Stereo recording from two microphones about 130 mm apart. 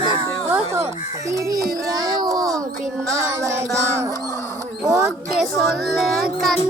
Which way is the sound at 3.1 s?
25° right (ahead or behind).